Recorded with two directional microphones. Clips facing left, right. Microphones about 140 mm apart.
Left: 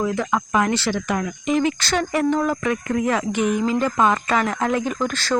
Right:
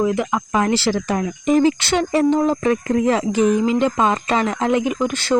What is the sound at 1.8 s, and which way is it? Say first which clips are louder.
Speech: right 4 dB; 25° right (ahead or behind).